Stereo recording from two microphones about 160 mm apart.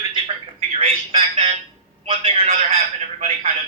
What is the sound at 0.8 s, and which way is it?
A man's voice, 40° right (ahead or behind).